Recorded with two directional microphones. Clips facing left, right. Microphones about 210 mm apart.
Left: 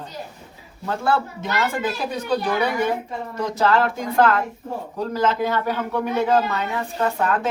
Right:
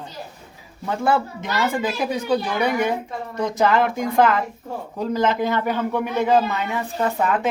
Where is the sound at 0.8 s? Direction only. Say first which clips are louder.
Right 1 dB; 15° right (ahead or behind).